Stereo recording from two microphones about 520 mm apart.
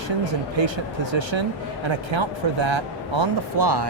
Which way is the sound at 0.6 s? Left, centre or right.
Right.